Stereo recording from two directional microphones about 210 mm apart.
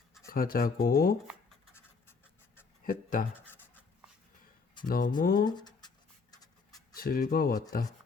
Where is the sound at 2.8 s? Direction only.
40° left (ahead or behind).